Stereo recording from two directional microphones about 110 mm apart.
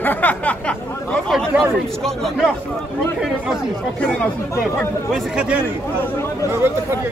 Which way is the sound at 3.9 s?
15° left (ahead or behind).